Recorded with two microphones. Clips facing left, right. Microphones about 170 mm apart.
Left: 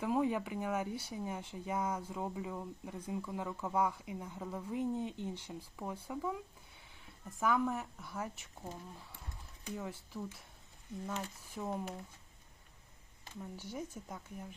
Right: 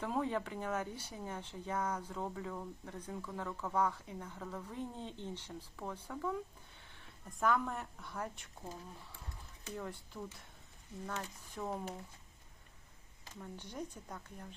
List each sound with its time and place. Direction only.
0.0 s speech: 10° left (ahead or behind)
9.7 s speech: 5° left (ahead or behind)
13.4 s speech: 5° left (ahead or behind)